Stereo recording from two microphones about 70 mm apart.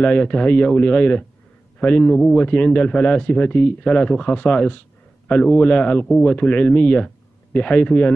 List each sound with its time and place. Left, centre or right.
0.0 s a man's voice: centre